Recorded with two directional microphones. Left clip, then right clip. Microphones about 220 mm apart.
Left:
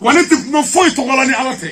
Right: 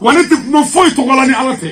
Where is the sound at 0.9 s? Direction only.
5° left (ahead or behind).